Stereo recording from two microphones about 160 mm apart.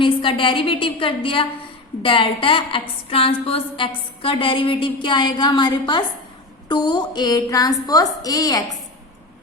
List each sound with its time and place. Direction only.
0.0 s a woman's voice: 30° left (ahead or behind)